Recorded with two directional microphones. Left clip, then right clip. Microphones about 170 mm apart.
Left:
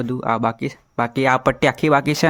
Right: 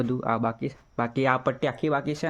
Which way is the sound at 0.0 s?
20° left (ahead or behind).